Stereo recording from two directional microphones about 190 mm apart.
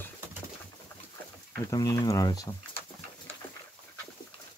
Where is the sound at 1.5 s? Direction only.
15° left (ahead or behind).